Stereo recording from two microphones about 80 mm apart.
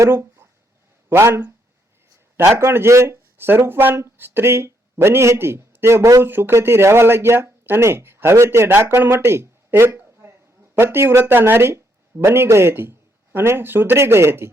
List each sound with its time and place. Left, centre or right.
0.0 s speech: right
2.6 s speech: right